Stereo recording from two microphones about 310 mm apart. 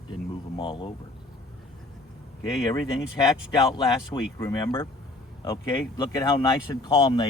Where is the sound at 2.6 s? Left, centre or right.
Centre.